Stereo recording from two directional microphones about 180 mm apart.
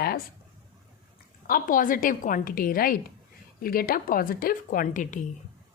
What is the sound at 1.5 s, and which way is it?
Speech, 50° left (ahead or behind).